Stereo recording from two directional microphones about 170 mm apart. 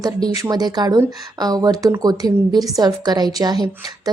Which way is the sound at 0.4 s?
25° right (ahead or behind).